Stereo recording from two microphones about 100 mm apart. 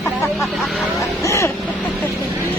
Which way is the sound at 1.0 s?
30° left (ahead or behind).